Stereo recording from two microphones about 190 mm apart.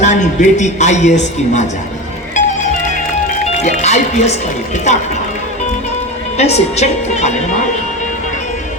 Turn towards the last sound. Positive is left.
turn(degrees=35)  # may be behind; listen again after turning